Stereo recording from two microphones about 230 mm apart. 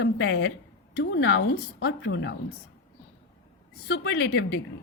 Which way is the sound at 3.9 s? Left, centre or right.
Left.